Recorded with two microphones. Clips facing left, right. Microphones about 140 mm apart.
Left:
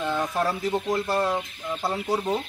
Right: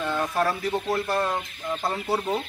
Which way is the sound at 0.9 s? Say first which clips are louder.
Left 1 dB; 10° left (ahead or behind).